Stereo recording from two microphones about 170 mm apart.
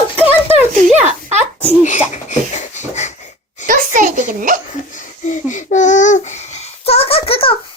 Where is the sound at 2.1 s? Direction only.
45° left (ahead or behind).